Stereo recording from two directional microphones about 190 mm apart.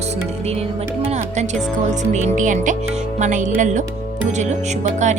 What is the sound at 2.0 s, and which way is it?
Speech, 40° right (ahead or behind).